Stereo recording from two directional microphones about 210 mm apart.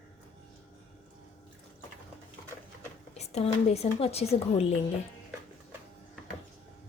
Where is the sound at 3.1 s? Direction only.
30° left (ahead or behind).